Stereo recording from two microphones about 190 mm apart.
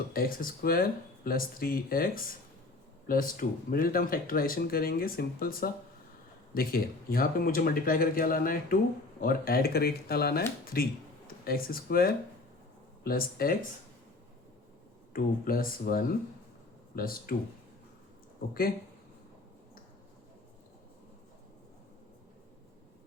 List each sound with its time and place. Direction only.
0.1 s speech: 50° left (ahead or behind)
15.1 s speech: 50° left (ahead or behind)